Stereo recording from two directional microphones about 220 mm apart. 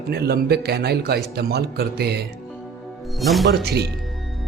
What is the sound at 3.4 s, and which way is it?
Speech, 50° right (ahead or behind).